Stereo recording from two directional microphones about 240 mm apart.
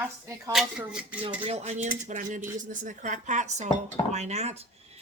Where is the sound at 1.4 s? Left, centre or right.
Right.